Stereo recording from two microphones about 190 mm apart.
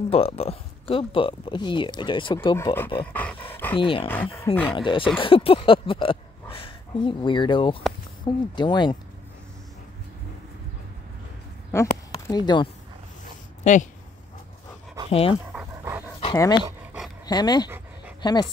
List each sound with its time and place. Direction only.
0.1 s speech: 30° left (ahead or behind)
2.5 s speech: 15° left (ahead or behind)
3.7 s speech: 25° left (ahead or behind)
4.1 s speech: 10° left (ahead or behind)
4.6 s speech: 25° left (ahead or behind)
11.7 s a sound: 15° left (ahead or behind)
13.7 s speech: 40° left (ahead or behind)
15.0 s speech: 30° left (ahead or behind)
15.6 s dog: 15° right (ahead or behind)
16.3 s speech: 20° left (ahead or behind)